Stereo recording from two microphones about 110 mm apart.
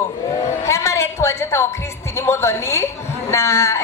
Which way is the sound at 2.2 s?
25° left (ahead or behind).